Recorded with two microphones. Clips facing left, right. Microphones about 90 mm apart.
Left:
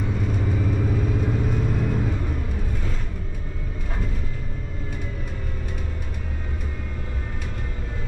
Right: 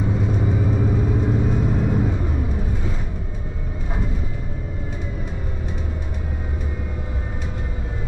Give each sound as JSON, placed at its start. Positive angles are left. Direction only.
{"t": 0.0, "sound": "vehicle", "side_deg": -15}